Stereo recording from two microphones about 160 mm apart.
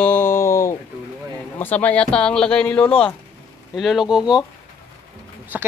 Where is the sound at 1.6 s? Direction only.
10° left (ahead or behind).